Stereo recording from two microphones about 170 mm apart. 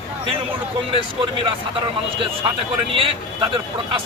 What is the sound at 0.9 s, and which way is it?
Speech, 30° right (ahead or behind).